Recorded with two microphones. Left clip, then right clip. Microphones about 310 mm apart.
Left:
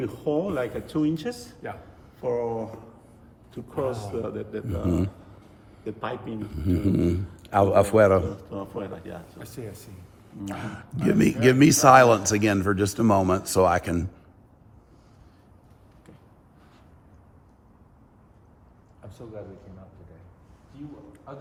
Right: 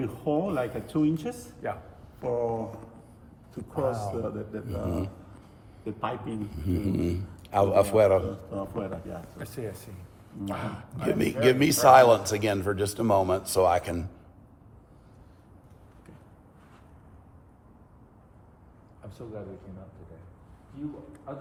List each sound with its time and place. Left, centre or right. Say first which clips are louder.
0.0 s speech: left 2 dB; centre
5.8 s speech: even; centre
6.6 s a man's voice: left 6 dB; left
8.4 s speech: even; centre
11.0 s a man's voice: left 3 dB; left